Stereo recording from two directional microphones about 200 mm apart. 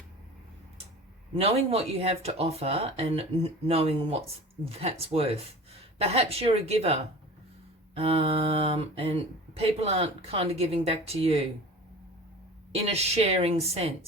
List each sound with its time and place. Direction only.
1.4 s speech: 30° right (ahead or behind)
12.7 s speech: 30° right (ahead or behind)